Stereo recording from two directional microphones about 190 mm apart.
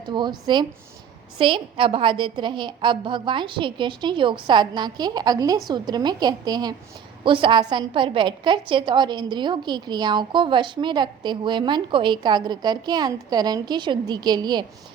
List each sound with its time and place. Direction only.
0.0 s a woman's voice: 25° right (ahead or behind)